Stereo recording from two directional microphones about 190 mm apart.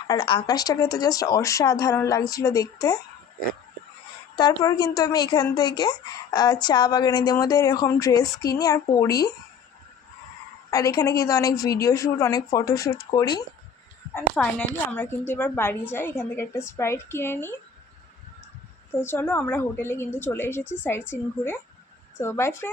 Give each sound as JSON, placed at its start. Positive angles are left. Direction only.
{"t": 0.1, "sound": "speech", "side_deg": 25}
{"t": 4.4, "sound": "speech", "side_deg": 20}
{"t": 10.7, "sound": "speech", "side_deg": 20}
{"t": 14.3, "sound": "speech", "side_deg": 5}
{"t": 19.1, "sound": "speech", "side_deg": 10}